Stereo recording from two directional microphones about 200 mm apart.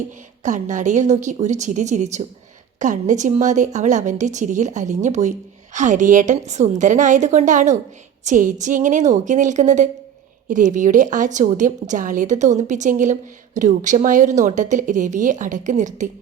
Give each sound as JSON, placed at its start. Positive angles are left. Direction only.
{"t": 0.4, "sound": "a woman's voice", "side_deg": -40}